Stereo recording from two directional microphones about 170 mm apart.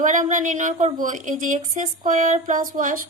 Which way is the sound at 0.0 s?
45° right (ahead or behind).